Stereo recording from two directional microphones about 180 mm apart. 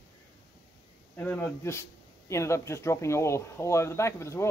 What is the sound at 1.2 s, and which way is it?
Speech, 10° left (ahead or behind).